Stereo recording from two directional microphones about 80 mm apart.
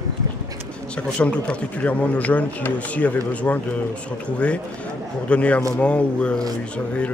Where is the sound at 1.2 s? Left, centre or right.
Centre.